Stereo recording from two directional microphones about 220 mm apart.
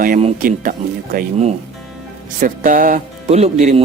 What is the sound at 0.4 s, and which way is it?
Speech, 40° right (ahead or behind).